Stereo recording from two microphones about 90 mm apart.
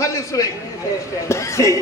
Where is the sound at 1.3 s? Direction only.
35° left (ahead or behind).